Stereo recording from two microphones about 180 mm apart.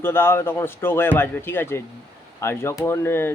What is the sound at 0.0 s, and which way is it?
Speech, 15° left (ahead or behind).